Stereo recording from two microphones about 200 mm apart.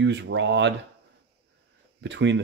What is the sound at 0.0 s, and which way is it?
Speech, 60° right (ahead or behind).